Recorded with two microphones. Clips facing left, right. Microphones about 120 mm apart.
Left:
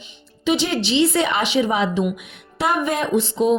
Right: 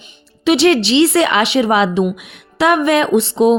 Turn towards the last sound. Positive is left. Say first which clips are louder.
# right 6 dB
turn(degrees=-75)  # may be behind; listen again after turning